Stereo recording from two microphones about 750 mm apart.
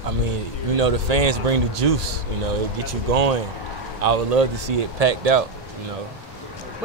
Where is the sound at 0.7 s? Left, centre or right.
Right.